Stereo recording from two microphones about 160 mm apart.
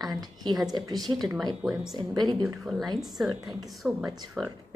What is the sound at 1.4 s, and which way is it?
Speech, centre (ahead or behind).